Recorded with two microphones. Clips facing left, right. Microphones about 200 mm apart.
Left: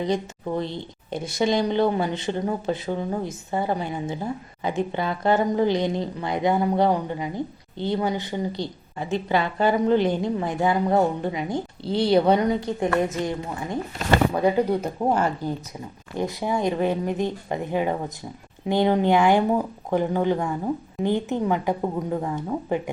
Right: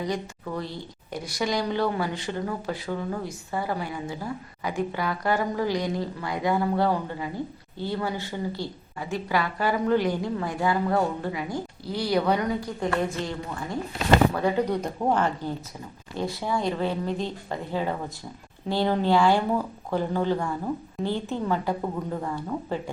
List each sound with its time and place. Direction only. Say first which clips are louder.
0.0 s speech: left 5 dB; 25° left (ahead or behind)